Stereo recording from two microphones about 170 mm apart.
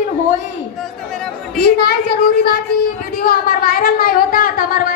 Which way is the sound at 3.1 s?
60° left (ahead or behind).